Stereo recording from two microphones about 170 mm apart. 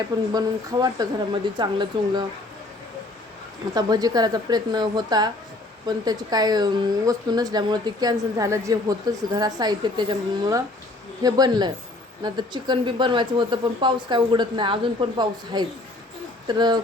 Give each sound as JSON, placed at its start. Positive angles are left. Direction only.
{"t": 0.3, "sound": "speech", "side_deg": -20}
{"t": 3.8, "sound": "speech", "side_deg": -25}